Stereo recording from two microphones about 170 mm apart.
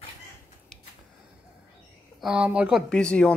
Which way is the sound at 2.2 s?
5° right (ahead or behind).